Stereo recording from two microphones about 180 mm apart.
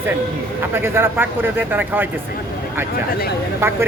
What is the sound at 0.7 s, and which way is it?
Speech, 15° right (ahead or behind).